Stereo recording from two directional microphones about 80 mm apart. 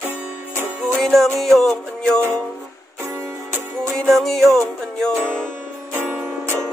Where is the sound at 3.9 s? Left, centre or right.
Centre.